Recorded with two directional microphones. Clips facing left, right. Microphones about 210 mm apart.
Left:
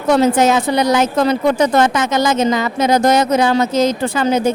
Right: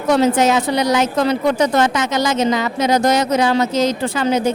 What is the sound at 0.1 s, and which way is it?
A woman's voice, 50° left (ahead or behind).